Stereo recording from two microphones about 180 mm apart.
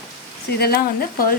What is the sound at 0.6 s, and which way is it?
Speech, 60° left (ahead or behind).